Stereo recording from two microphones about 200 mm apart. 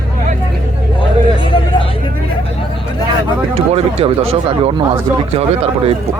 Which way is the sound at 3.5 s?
30° right (ahead or behind).